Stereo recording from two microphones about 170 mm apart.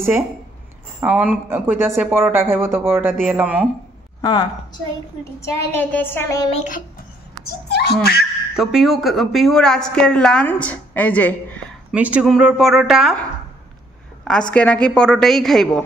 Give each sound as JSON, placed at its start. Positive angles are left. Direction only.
{"t": 1.0, "sound": "speech", "side_deg": -10}
{"t": 4.2, "sound": "a woman's voice", "side_deg": 25}
{"t": 5.7, "sound": "a woman's voice", "side_deg": 10}
{"t": 6.5, "sound": "a child's voice", "side_deg": 45}
{"t": 7.4, "sound": "a child's voice", "side_deg": 70}
{"t": 8.5, "sound": "a woman's voice", "side_deg": 0}
{"t": 11.9, "sound": "a woman's voice", "side_deg": -10}
{"t": 14.5, "sound": "a woman's voice", "side_deg": 10}